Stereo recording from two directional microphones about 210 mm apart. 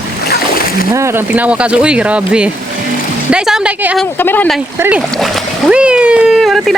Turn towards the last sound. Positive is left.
turn(degrees=0)  # may be behind; listen again after turning